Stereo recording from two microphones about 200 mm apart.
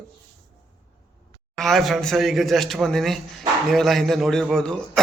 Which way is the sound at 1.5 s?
Centre (ahead or behind).